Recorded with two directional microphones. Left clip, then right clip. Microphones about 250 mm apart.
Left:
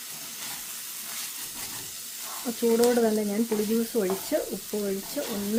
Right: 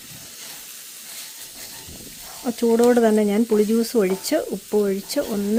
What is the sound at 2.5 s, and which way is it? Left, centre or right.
Stir, right.